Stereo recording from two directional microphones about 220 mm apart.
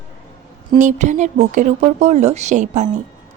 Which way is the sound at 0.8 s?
35° right (ahead or behind).